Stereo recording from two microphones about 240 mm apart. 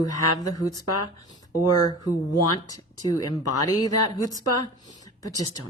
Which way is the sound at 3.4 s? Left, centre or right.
Left.